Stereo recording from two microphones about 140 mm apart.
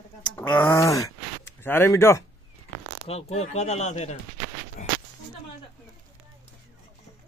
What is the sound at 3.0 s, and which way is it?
Speech, 50° left (ahead or behind).